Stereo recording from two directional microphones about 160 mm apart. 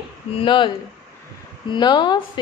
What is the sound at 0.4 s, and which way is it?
Speech, 30° left (ahead or behind).